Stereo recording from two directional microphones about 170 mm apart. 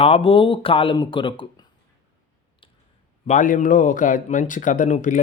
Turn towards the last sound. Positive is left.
turn(degrees=50)  # may be behind; listen again after turning